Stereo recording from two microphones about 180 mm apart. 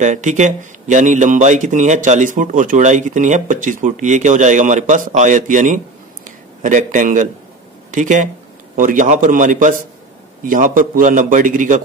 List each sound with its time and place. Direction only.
0.0 s a man's voice: 40° right (ahead or behind)